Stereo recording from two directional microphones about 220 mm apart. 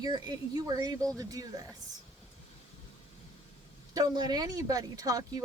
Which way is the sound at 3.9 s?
15° right (ahead or behind).